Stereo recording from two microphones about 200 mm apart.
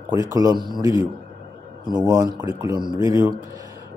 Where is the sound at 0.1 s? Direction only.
20° right (ahead or behind).